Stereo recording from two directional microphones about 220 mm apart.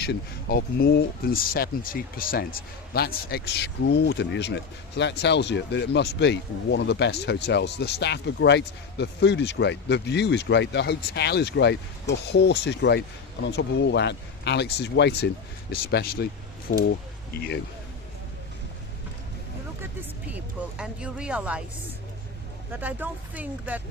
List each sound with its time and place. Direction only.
0.0 s speech: 45° left (ahead or behind)
19.8 s speech: 10° right (ahead or behind)
22.8 s speech: 5° right (ahead or behind)